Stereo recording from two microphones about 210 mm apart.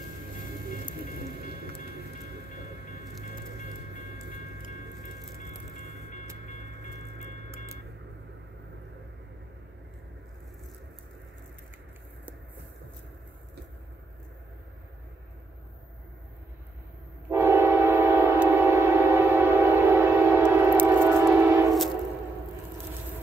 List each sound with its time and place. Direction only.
17.3 s train: 10° right (ahead or behind)